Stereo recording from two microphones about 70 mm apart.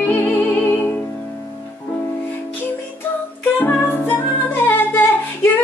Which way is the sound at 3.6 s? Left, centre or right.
Left.